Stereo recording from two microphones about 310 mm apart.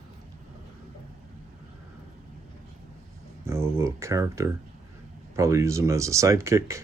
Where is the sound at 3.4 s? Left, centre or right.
Centre.